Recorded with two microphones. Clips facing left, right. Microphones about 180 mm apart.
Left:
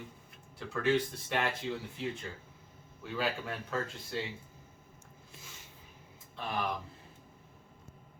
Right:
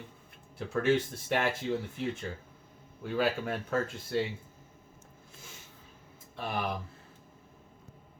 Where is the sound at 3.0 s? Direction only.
50° right (ahead or behind).